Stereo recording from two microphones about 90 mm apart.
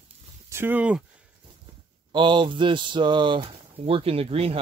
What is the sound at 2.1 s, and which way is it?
Speech, 60° right (ahead or behind).